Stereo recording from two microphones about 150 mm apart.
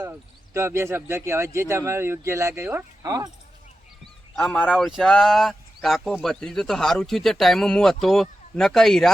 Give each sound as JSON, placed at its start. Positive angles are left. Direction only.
{"t": 0.0, "sound": "speech", "side_deg": -20}
{"t": 4.4, "sound": "speech", "side_deg": 5}